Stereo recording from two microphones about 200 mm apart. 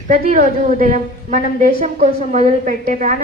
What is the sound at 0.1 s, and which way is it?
A woman's voice, 45° right (ahead or behind).